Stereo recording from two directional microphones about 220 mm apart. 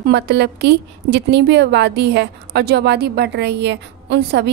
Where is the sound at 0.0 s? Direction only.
50° right (ahead or behind).